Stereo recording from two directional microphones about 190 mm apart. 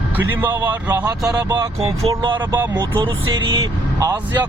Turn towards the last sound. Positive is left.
turn(degrees=-10)  # may be behind; listen again after turning